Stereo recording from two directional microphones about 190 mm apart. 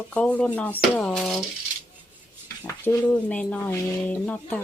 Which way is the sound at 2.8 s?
10° left (ahead or behind).